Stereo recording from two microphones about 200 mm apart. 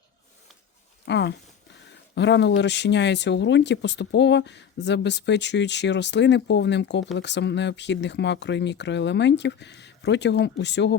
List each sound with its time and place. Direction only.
1.0 s speech: 60° left (ahead or behind)